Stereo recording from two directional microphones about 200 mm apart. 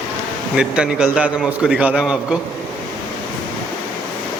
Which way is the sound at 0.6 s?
5° right (ahead or behind).